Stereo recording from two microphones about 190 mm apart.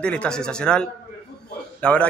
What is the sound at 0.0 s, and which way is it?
A man's voice, 5° left (ahead or behind).